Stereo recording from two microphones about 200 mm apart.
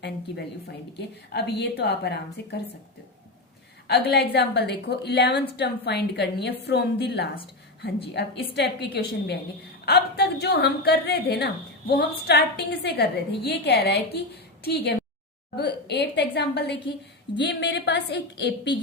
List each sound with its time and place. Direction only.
0.9 s a woman's voice: 55° left (ahead or behind)
3.8 s a woman's voice: 55° left (ahead or behind)
8.5 s a woman's voice: 55° left (ahead or behind)